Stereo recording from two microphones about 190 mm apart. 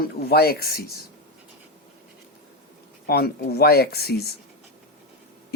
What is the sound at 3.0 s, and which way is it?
Speech, 55° left (ahead or behind).